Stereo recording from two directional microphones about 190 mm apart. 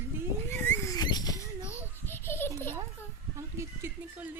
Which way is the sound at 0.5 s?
10° left (ahead or behind).